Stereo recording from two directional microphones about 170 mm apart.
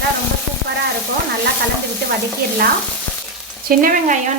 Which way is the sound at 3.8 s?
55° right (ahead or behind).